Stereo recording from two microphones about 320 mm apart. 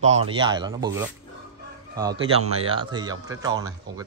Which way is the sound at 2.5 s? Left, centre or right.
Centre.